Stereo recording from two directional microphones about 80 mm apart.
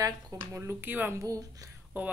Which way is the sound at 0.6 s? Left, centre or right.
Right.